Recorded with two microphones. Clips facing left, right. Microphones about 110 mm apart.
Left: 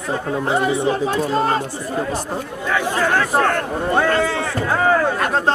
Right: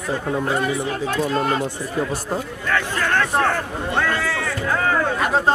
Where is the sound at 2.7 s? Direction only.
10° left (ahead or behind).